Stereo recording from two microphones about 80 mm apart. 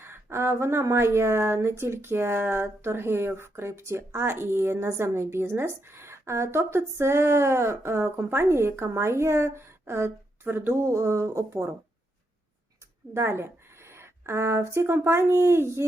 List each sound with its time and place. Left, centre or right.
0.0 s speech: right
13.1 s speech: right